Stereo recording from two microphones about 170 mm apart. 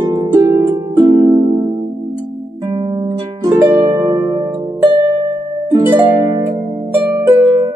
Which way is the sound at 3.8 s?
20° right (ahead or behind).